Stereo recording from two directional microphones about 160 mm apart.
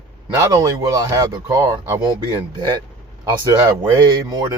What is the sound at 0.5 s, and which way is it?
Speech, 20° right (ahead or behind).